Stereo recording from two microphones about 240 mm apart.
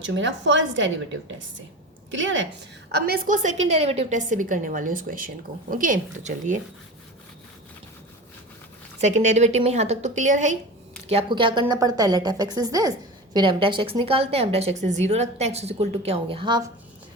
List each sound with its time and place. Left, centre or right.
0.0 s a woman's voice: right
2.0 s a woman's voice: right
2.9 s a woman's voice: right
9.0 s a woman's voice: right